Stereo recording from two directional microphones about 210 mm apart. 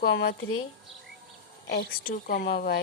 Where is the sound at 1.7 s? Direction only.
45° left (ahead or behind).